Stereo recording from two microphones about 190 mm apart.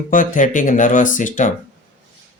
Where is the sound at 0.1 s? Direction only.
45° left (ahead or behind).